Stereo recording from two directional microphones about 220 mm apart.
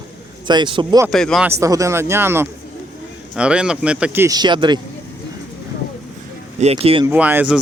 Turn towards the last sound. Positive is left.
turn(degrees=-5)  # may be behind; listen again after turning